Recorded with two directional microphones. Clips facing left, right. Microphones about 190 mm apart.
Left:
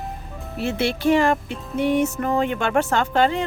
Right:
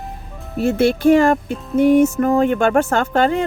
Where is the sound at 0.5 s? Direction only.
45° right (ahead or behind).